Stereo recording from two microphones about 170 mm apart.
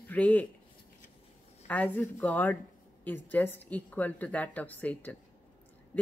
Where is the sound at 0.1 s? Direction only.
10° left (ahead or behind).